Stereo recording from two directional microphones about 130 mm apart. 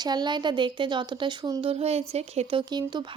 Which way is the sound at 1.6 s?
50° right (ahead or behind).